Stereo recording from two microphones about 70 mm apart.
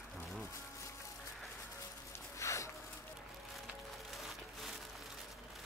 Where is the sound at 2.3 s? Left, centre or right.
Left.